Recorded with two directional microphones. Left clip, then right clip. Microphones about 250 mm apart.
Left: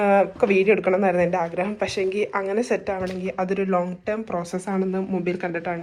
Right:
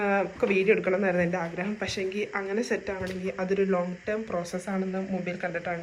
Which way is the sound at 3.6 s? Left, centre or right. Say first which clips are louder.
Left 3 dB; centre.